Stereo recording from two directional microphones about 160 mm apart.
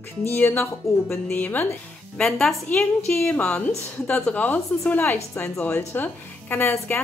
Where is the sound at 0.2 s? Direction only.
15° left (ahead or behind).